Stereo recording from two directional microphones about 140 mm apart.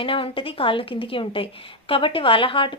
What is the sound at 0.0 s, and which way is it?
Speech, 40° left (ahead or behind).